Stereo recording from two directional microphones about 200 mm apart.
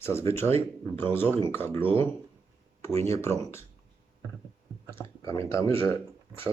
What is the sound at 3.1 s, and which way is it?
Speech, 15° left (ahead or behind).